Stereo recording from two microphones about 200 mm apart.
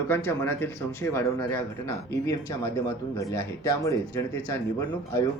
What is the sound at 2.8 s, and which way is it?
Speech, 15° left (ahead or behind).